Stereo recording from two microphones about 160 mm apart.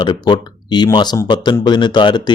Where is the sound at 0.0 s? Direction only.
30° left (ahead or behind).